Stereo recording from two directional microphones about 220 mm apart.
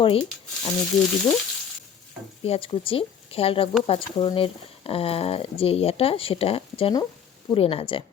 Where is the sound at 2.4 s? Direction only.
25° left (ahead or behind).